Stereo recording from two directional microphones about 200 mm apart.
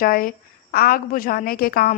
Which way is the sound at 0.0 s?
45° left (ahead or behind).